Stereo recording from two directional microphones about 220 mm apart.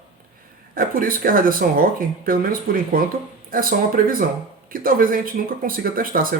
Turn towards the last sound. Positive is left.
turn(degrees=-40)  # may be behind; listen again after turning